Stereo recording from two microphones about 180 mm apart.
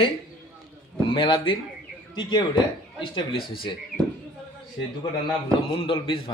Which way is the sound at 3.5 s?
30° left (ahead or behind).